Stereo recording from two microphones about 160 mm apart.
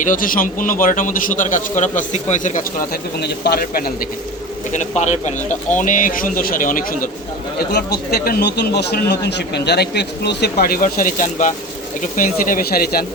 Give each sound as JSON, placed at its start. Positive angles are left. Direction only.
{"t": 0.0, "sound": "a man's voice", "side_deg": 55}
{"t": 2.9, "sound": "speech", "side_deg": 90}
{"t": 4.7, "sound": "a man's voice", "side_deg": 45}
{"t": 7.7, "sound": "speech", "side_deg": 90}